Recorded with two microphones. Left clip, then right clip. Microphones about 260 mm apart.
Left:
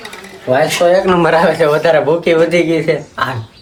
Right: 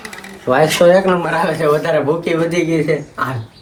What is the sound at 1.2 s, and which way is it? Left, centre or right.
A man's voice, left.